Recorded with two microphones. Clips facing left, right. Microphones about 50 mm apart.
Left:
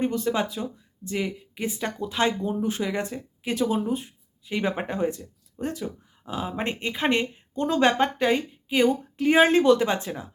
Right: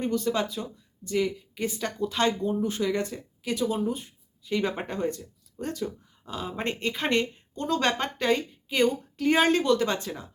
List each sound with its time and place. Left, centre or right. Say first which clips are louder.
0.0 s speech: left 2 dB; left